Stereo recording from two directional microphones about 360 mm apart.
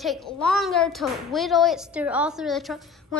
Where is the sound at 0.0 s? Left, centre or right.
Centre.